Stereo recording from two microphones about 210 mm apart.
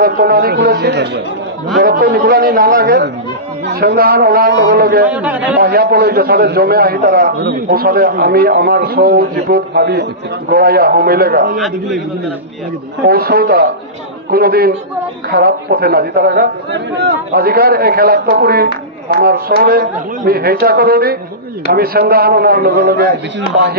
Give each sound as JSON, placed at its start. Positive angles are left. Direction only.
{"t": 0.0, "sound": "a man's voice", "side_deg": -45}
{"t": 5.1, "sound": "a man's voice", "side_deg": -5}
{"t": 5.6, "sound": "a man's voice", "side_deg": -45}
{"t": 11.5, "sound": "a man's voice", "side_deg": 0}
{"t": 13.0, "sound": "a man's voice", "side_deg": -50}